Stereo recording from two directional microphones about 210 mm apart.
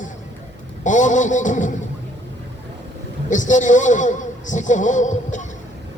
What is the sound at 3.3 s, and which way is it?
A man's voice, 35° left (ahead or behind).